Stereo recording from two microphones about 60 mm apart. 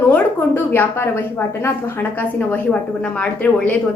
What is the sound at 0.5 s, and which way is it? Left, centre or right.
A woman's voice, left.